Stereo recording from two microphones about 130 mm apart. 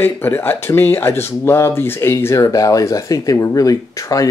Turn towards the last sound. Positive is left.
turn(degrees=25)  # may be behind; listen again after turning